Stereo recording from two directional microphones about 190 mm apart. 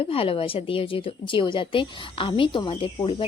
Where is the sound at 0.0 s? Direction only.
30° left (ahead or behind).